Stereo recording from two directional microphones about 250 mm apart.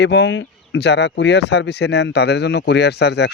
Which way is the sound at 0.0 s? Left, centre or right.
Left.